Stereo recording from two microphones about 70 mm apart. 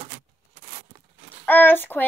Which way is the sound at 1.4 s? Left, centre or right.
Left.